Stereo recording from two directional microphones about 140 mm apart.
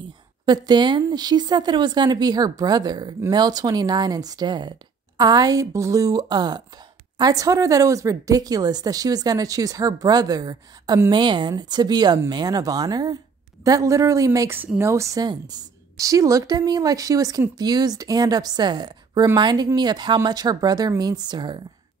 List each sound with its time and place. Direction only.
0.5 s a woman's voice: 30° right (ahead or behind)